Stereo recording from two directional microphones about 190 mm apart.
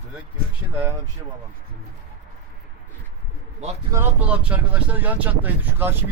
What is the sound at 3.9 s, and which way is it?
Speech, 10° right (ahead or behind).